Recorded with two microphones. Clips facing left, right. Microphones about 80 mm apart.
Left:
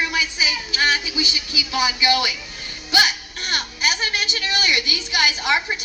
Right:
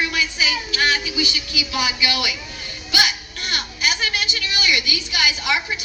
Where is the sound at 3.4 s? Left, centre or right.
Left.